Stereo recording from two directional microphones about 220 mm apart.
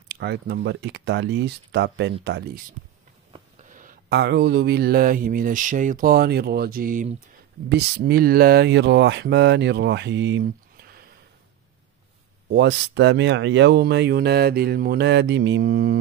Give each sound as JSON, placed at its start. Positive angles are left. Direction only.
{"t": 0.1, "sound": "speech", "side_deg": -50}
{"t": 3.6, "sound": "a sound", "side_deg": -35}
{"t": 7.7, "sound": "speech", "side_deg": -45}
{"t": 12.4, "sound": "speech", "side_deg": -55}